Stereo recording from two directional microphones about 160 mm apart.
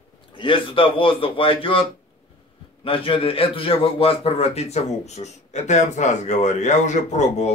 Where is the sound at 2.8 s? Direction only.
35° left (ahead or behind).